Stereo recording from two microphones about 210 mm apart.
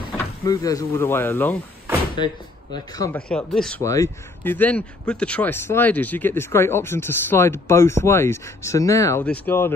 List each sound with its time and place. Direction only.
0.5 s speech: 15° left (ahead or behind)
2.1 s speech: 20° left (ahead or behind)
3.2 s speech: 5° left (ahead or behind)
3.8 s speech: 15° left (ahead or behind)